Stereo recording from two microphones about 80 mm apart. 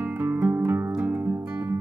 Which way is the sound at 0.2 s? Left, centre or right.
Right.